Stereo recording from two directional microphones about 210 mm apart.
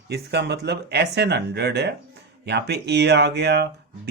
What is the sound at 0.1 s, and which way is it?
Speech, 55° right (ahead or behind).